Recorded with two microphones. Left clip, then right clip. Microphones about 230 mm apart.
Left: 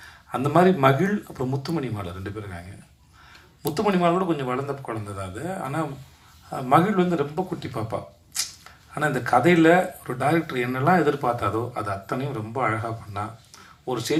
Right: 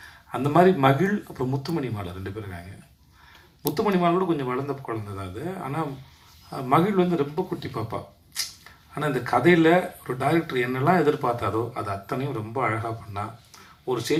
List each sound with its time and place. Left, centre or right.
0.0 s speech: left
3.8 s speech: left